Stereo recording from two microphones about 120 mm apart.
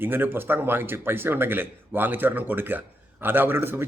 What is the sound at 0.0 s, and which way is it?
Speech, 15° right (ahead or behind).